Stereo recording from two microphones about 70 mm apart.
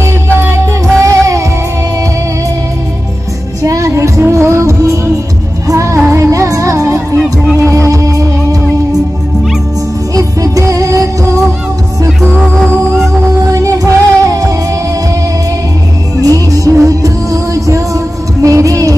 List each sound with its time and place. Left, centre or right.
0.0 s music: right
0.9 s music: right
3.6 s music: right
10.1 s music: right
12.5 s music: centre
13.5 s music: right
16.2 s music: right